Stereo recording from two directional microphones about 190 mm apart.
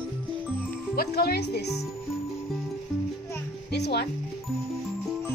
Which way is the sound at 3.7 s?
60° left (ahead or behind).